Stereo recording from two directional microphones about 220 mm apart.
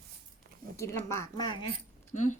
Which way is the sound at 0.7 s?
10° left (ahead or behind).